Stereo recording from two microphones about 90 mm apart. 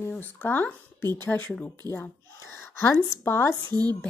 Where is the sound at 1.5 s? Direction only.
10° left (ahead or behind).